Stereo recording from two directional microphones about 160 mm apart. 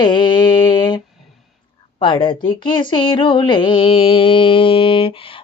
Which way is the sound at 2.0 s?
30° left (ahead or behind).